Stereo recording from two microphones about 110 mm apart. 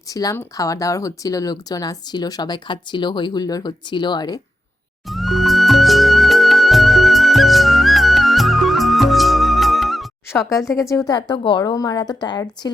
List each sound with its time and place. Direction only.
0.1 s speech: 30° left (ahead or behind)
5.0 s music: centre (ahead or behind)
10.5 s speech: 30° left (ahead or behind)